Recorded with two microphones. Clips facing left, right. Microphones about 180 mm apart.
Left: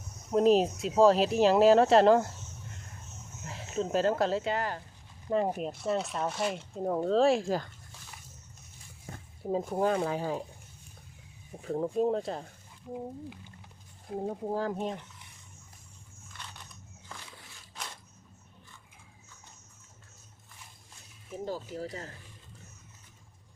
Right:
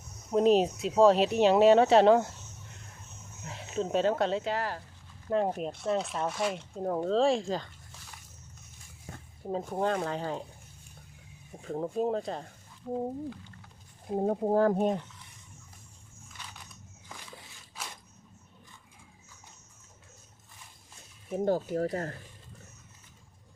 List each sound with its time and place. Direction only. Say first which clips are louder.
0.3 s speech: even; centre (ahead or behind)
3.4 s speech: even; centre (ahead or behind)
9.4 s speech: left 2 dB; 5° left (ahead or behind)
11.6 s speech: left 2 dB; centre (ahead or behind)
13.3 s a sound: right 2 dB; 15° left (ahead or behind)
14.1 s speech: right 5 dB; 30° right (ahead or behind)
14.4 s speech: right 9 dB; 50° right (ahead or behind)
17.8 s a sound: even; 5° right (ahead or behind)
21.3 s speech: right 8 dB; 60° right (ahead or behind)